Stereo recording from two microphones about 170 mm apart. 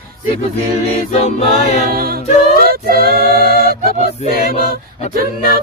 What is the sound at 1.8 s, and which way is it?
Mantra, 60° right (ahead or behind).